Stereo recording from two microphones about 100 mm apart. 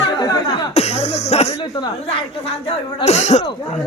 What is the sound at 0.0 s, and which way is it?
Cough, 40° left (ahead or behind).